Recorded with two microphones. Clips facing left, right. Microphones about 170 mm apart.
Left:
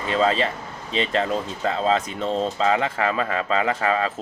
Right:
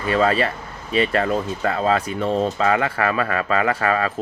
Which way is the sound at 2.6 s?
20° left (ahead or behind).